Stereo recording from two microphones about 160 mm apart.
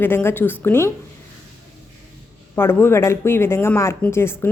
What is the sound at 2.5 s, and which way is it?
Speech, 15° left (ahead or behind).